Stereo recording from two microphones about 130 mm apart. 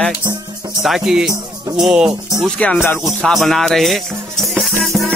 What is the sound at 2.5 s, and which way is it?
Speech, 10° left (ahead or behind).